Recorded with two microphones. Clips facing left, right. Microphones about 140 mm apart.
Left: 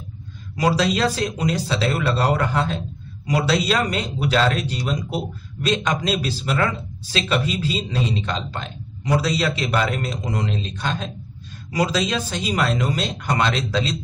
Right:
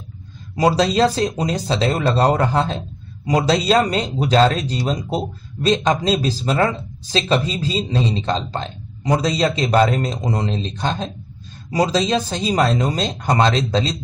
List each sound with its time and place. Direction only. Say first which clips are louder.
0.6 s speech: right 4 dB; 35° right (ahead or behind)